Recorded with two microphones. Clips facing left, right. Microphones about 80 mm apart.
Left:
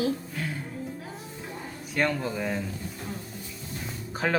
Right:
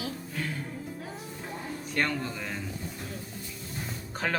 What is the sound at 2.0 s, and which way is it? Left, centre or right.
Speech, centre.